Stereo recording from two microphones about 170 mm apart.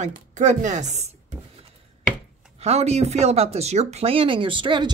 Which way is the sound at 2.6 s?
40° right (ahead or behind).